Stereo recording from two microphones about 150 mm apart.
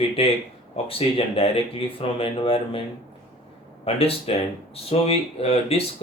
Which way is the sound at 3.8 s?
40° left (ahead or behind).